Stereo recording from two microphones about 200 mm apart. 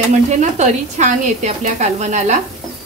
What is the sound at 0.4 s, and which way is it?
A woman's voice, 35° right (ahead or behind).